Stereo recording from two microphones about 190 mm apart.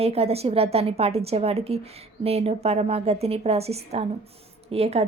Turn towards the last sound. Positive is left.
turn(degrees=-30)  # may be behind; listen again after turning